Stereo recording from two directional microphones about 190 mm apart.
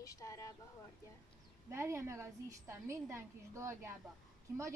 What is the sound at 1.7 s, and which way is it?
Speech, 15° right (ahead or behind).